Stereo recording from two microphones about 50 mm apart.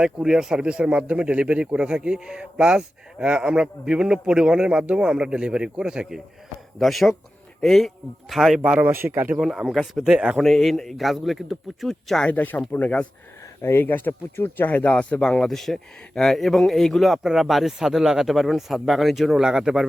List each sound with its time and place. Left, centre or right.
0.0 s speech: centre
6.7 s speech: centre
8.6 s speech: right
8.9 s speech: right
9.4 s speech: centre
9.7 s speech: centre
10.0 s speech: centre
10.3 s speech: centre
12.3 s speech: left
13.6 s speech: left
13.8 s speech: left
14.8 s speech: left
15.2 s speech: centre